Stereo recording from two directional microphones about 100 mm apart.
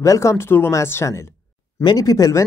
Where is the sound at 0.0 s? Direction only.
30° left (ahead or behind).